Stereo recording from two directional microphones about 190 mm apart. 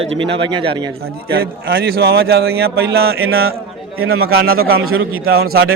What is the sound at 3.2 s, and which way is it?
A man's voice, 90° right.